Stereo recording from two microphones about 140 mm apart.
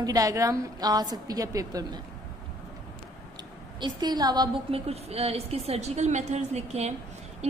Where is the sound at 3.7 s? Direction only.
30° right (ahead or behind).